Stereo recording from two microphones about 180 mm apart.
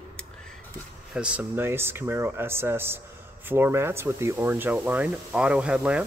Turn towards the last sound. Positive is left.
turn(degrees=-5)  # may be behind; listen again after turning